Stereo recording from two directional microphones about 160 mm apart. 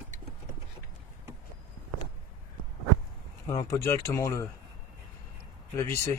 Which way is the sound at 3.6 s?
20° left (ahead or behind).